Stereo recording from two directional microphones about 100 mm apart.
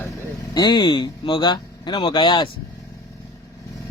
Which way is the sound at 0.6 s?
45° left (ahead or behind).